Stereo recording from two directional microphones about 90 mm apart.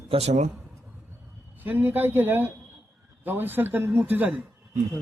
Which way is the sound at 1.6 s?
20° right (ahead or behind).